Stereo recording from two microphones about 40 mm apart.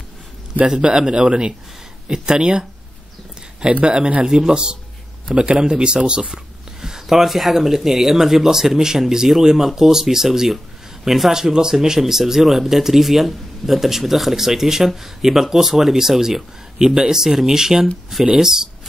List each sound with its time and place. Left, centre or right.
0.7 s speech: right
3.8 s speech: right